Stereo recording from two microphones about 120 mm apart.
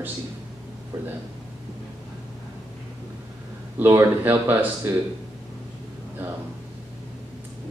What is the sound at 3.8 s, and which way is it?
Speech, 20° right (ahead or behind).